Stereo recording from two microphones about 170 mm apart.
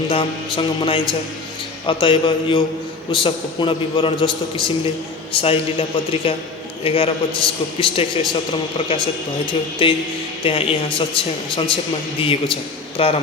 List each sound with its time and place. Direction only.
0.1 s a man's voice: 30° left (ahead or behind)
9.5 s speech: 30° left (ahead or behind)